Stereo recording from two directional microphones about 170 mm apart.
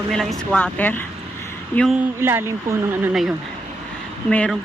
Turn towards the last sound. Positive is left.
turn(degrees=5)  # may be behind; listen again after turning